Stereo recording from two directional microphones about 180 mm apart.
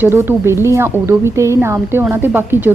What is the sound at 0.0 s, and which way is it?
A woman's voice, 10° right (ahead or behind).